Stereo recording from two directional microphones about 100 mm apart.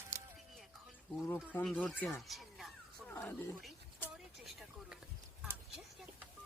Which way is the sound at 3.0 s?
20° left (ahead or behind).